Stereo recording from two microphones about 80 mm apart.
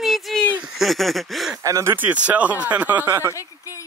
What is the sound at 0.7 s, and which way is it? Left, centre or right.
Speech, centre.